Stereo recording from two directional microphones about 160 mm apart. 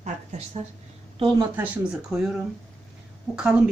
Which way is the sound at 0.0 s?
40° right (ahead or behind).